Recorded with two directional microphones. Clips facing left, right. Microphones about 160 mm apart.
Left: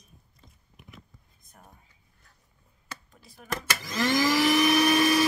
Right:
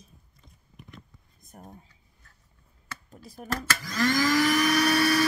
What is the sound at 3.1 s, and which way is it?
Speech, 45° right (ahead or behind).